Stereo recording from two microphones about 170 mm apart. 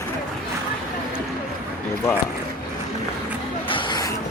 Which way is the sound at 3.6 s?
30° left (ahead or behind).